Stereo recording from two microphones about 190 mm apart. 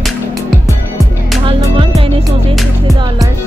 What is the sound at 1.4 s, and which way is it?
Music, 30° right (ahead or behind).